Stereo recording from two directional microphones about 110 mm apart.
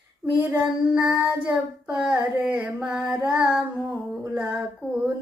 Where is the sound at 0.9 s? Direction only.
15° right (ahead or behind).